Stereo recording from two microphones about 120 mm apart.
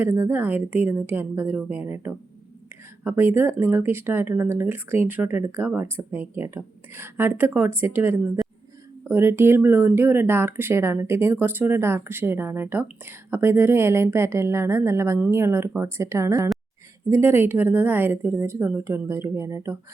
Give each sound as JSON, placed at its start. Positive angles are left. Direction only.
{"t": 0.0, "sound": "a woman's voice", "side_deg": -20}